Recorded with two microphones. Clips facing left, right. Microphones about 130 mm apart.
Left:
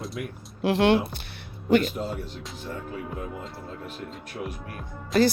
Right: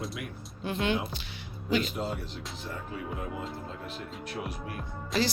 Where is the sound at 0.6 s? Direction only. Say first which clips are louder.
Left 9 dB; 80° left.